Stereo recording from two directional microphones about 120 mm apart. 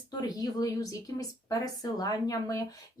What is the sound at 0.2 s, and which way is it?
Speech, 30° left (ahead or behind).